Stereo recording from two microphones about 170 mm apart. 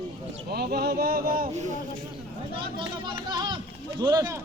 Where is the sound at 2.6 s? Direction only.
30° right (ahead or behind).